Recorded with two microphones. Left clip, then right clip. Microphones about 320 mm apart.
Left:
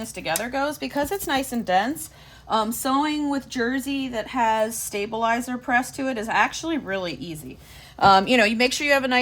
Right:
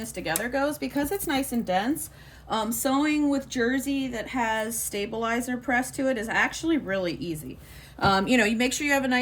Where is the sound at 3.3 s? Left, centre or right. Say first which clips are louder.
Even; centre.